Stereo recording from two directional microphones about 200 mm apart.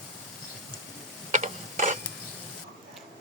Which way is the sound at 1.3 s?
40° right (ahead or behind).